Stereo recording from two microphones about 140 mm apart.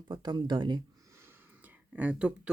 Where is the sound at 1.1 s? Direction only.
15° right (ahead or behind).